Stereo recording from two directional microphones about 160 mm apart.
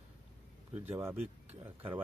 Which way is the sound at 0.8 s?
15° right (ahead or behind).